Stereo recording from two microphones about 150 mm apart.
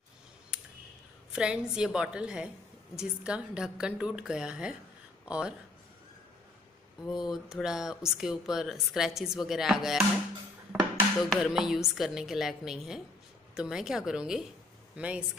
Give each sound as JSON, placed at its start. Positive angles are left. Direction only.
{"t": 1.3, "sound": "speech", "side_deg": -5}
{"t": 7.1, "sound": "speech", "side_deg": 0}
{"t": 11.1, "sound": "speech", "side_deg": 0}